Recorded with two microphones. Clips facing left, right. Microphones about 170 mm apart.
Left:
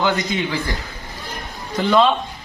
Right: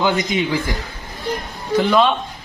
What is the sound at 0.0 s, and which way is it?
Speech, 15° right (ahead or behind).